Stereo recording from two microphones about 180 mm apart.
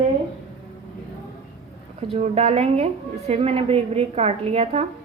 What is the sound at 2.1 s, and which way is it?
A woman's voice, 40° right (ahead or behind).